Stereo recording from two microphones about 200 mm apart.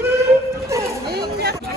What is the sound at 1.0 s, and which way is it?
Chatter, 50° right (ahead or behind).